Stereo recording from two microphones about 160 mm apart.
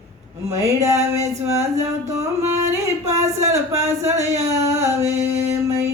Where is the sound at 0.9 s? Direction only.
45° right (ahead or behind).